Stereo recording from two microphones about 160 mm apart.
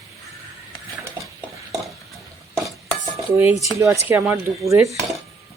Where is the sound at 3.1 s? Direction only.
15° right (ahead or behind).